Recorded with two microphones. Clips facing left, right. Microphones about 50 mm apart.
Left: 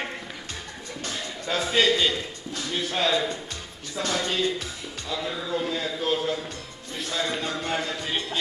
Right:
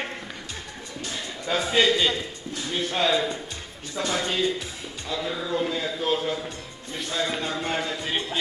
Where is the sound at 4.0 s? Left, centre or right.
Right.